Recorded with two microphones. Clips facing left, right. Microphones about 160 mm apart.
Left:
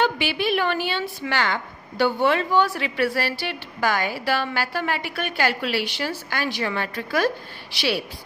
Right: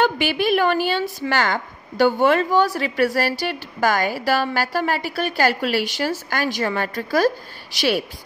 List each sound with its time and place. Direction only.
0.0 s a woman's voice: 45° right (ahead or behind)